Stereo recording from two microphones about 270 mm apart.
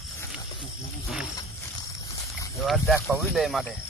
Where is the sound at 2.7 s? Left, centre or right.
Centre.